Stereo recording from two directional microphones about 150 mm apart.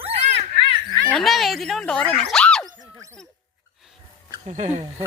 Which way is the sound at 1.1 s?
Centre (ahead or behind).